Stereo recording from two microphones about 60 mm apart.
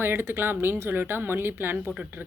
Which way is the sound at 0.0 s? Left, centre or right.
Right.